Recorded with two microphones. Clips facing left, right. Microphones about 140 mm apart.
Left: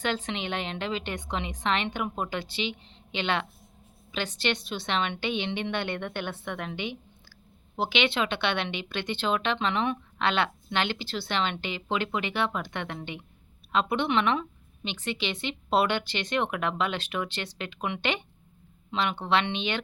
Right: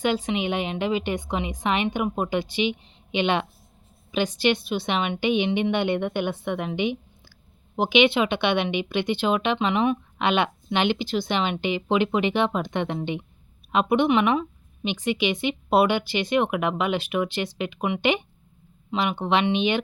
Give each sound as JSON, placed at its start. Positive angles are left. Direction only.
{"t": 0.0, "sound": "speech", "side_deg": -10}